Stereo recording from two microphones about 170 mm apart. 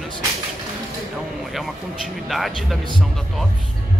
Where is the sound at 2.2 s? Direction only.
Centre (ahead or behind).